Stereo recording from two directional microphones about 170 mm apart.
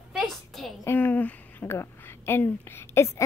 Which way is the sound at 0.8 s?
10° left (ahead or behind).